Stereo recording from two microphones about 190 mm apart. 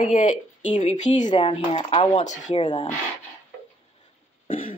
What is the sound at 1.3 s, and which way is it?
Speech, 25° left (ahead or behind).